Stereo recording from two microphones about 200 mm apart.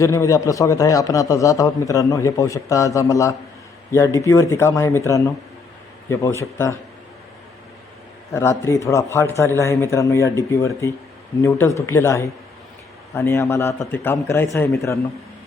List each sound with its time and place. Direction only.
0.0 s speech: 15° left (ahead or behind)
8.3 s speech: 15° left (ahead or behind)
11.4 s speech: 15° left (ahead or behind)